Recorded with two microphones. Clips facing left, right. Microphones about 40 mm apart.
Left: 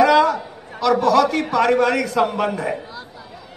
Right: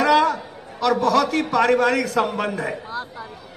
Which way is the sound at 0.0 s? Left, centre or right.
Centre.